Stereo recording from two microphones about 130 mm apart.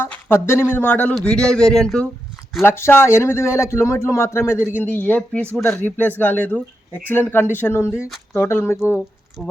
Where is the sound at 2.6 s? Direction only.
20° left (ahead or behind).